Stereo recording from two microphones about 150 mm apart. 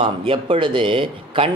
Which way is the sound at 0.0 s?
35° right (ahead or behind).